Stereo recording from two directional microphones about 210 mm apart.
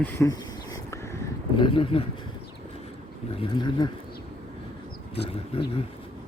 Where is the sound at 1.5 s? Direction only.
25° left (ahead or behind).